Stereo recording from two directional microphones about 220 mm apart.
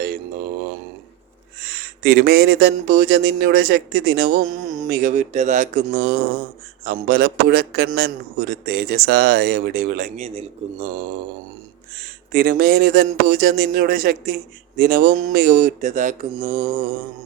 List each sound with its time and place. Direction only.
1.6 s a man's voice: 45° right (ahead or behind)
12.3 s a man's voice: 40° right (ahead or behind)